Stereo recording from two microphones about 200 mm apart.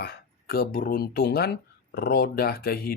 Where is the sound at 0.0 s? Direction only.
50° left (ahead or behind).